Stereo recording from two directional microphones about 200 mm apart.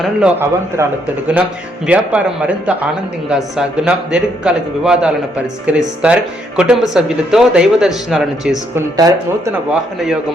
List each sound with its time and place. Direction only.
0.0 s a woman's voice: 5° right (ahead or behind)
1.9 s a woman's voice: 5° right (ahead or behind)
8.7 s speech: 15° right (ahead or behind)